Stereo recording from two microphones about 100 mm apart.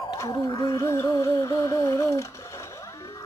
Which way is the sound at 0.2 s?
35° left (ahead or behind).